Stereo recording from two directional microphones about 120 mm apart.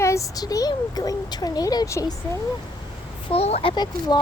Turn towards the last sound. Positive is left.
turn(degrees=35)  # may be behind; listen again after turning